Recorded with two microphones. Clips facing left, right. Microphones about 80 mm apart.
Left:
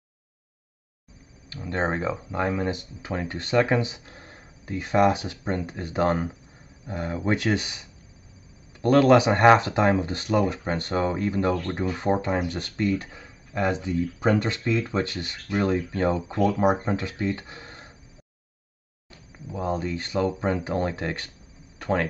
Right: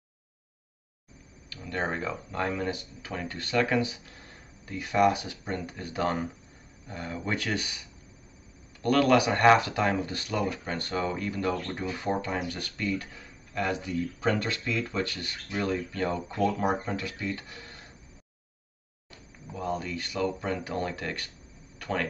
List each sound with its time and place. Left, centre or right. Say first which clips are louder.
1.5 s speech: left 5 dB; left
8.8 s speech: left 5 dB; left
19.5 s speech: left 4 dB; left
21.7 s a sound: left 6 dB; left